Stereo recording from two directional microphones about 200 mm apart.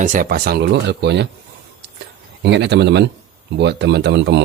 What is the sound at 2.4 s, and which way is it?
Speech, 60° right (ahead or behind).